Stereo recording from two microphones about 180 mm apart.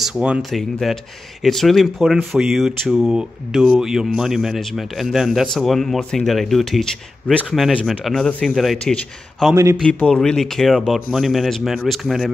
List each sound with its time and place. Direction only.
0.0 s speech: 5° right (ahead or behind)
9.5 s a man's voice: 15° right (ahead or behind)
9.8 s speech: 5° left (ahead or behind)